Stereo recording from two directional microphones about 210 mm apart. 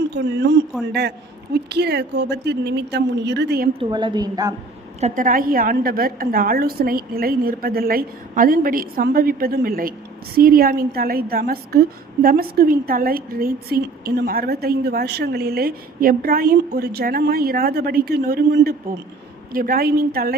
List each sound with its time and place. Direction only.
0.2 s speech: 55° right (ahead or behind)
1.7 s a woman's voice: 50° right (ahead or behind)
3.8 s a woman's voice: 20° right (ahead or behind)
4.9 s a woman's voice: 35° right (ahead or behind)